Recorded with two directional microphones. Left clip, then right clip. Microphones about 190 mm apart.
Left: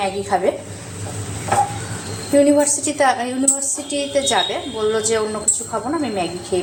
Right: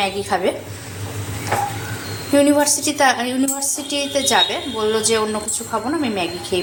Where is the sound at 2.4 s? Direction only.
5° left (ahead or behind).